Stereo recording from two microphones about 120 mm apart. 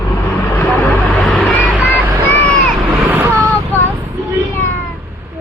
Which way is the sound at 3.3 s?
25° right (ahead or behind).